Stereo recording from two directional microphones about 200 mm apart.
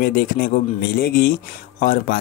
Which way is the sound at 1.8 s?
40° left (ahead or behind).